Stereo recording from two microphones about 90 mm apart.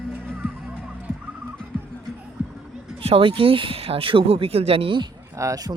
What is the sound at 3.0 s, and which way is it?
Speech, 85° right.